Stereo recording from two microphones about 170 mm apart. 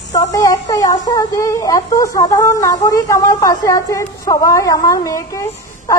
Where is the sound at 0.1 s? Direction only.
20° left (ahead or behind).